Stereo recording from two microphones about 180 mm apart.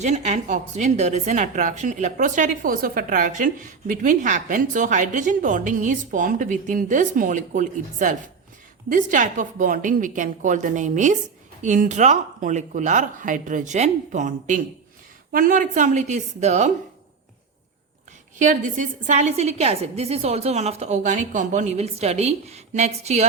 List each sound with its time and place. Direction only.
0.0 s a woman's voice: 40° right (ahead or behind)
18.3 s a woman's voice: 45° right (ahead or behind)